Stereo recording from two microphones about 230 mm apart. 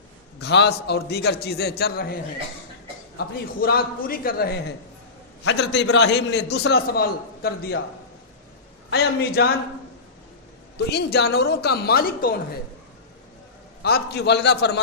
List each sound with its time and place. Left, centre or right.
0.3 s a man's voice: left
3.6 s a man's voice: left
8.9 s a man's voice: left
10.9 s a man's voice: left
13.8 s a man's voice: left